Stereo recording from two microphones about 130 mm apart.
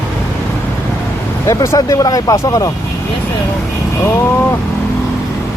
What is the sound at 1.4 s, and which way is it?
Speech, 25° left (ahead or behind).